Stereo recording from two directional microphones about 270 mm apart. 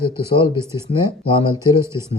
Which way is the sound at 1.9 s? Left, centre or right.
Centre.